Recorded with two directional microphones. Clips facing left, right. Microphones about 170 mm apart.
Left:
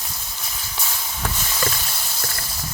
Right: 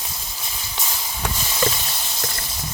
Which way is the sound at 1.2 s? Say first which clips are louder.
Right 3 dB; 15° right (ahead or behind).